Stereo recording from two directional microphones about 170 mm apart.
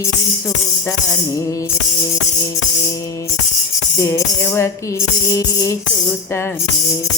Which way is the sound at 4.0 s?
15° left (ahead or behind).